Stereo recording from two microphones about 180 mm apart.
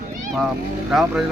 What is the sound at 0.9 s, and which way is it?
Speech, centre (ahead or behind).